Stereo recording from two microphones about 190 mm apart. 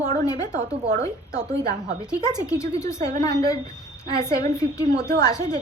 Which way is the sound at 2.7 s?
40° right (ahead or behind).